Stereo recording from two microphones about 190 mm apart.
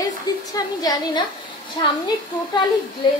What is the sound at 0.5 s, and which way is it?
A woman's voice, 20° left (ahead or behind).